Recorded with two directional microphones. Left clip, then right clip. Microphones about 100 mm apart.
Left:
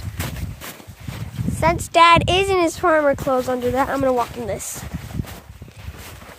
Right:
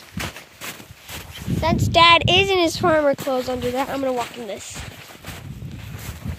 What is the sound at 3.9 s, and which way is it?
Speech, 30° left (ahead or behind).